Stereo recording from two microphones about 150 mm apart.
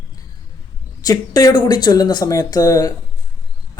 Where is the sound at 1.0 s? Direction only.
25° left (ahead or behind).